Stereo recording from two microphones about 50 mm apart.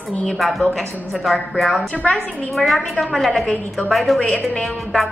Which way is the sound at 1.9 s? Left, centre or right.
Left.